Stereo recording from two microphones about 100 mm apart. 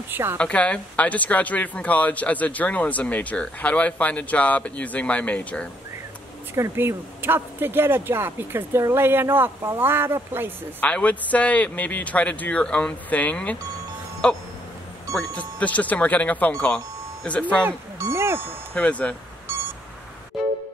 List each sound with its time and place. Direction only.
0.1 s speech: 25° right (ahead or behind)
0.4 s speech: 10° left (ahead or behind)
6.5 s speech: 25° right (ahead or behind)
10.8 s speech: 15° left (ahead or behind)
17.6 s music: 25° right (ahead or behind)
18.8 s speech: 10° left (ahead or behind)
19.5 s beep: 25° right (ahead or behind)